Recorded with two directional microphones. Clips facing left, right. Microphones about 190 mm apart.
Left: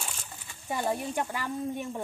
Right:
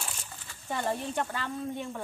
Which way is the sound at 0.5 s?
15° left (ahead or behind).